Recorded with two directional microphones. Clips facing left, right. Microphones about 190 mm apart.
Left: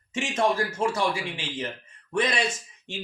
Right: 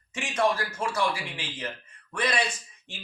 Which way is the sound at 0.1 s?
25° left (ahead or behind).